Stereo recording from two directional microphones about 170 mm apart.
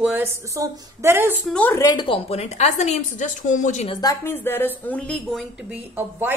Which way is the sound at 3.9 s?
20° left (ahead or behind).